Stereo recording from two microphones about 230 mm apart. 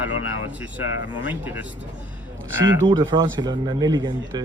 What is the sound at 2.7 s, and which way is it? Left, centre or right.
Speech, centre.